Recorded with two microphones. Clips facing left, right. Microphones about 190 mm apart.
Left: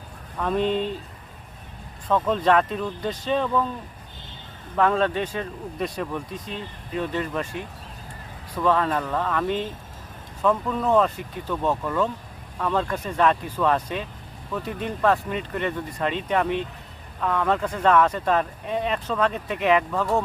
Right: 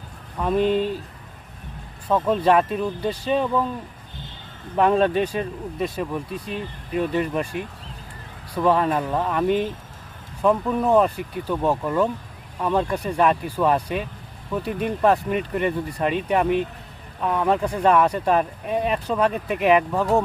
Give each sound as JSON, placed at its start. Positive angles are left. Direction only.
{"t": 0.3, "sound": "speech", "side_deg": -5}
{"t": 2.0, "sound": "speech", "side_deg": -10}
{"t": 4.8, "sound": "speech", "side_deg": -15}
{"t": 8.5, "sound": "speech", "side_deg": -15}